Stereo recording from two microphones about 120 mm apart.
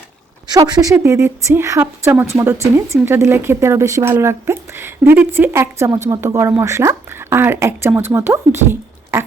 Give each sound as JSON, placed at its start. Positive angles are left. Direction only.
{"t": 0.4, "sound": "a woman's voice", "side_deg": -30}